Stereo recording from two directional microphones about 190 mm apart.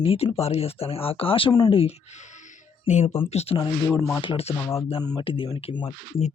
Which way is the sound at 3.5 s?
20° left (ahead or behind).